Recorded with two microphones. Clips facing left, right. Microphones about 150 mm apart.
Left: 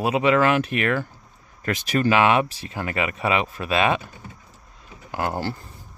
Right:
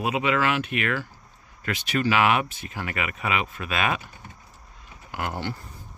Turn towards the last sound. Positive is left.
turn(degrees=35)  # may be behind; listen again after turning